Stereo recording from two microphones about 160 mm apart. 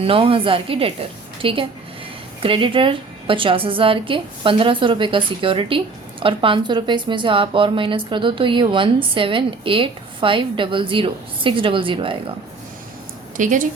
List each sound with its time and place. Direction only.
0.0 s a woman's voice: 35° right (ahead or behind)
13.3 s a woman's voice: 55° right (ahead or behind)